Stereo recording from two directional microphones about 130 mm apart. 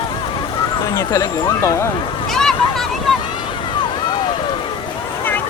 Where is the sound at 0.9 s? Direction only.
25° left (ahead or behind).